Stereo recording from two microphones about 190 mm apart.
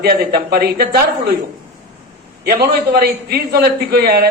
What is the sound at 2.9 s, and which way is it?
A man's voice, 55° right (ahead or behind).